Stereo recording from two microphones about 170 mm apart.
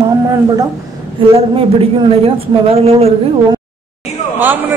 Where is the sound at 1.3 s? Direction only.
35° right (ahead or behind).